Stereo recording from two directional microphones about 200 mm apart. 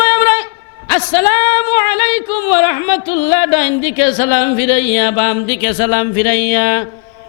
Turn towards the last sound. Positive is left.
turn(degrees=15)  # may be behind; listen again after turning